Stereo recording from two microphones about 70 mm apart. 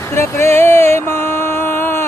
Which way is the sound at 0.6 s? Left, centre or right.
Left.